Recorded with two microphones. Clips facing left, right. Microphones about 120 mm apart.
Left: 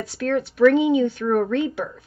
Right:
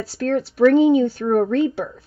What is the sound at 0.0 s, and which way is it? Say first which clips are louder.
Speech: right 2 dB; 35° right (ahead or behind).